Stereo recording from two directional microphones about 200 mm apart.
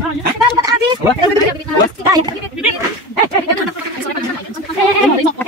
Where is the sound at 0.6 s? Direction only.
20° right (ahead or behind).